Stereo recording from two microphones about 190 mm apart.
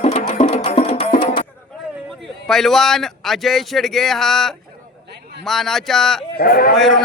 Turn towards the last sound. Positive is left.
turn(degrees=50)  # may be behind; listen again after turning